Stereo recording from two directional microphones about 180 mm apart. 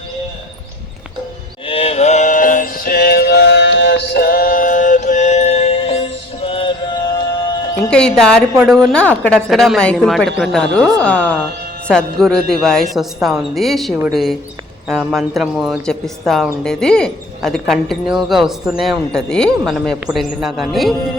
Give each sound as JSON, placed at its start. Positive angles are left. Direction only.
{"t": 1.6, "sound": "music", "side_deg": 30}
{"t": 7.8, "sound": "speech", "side_deg": 5}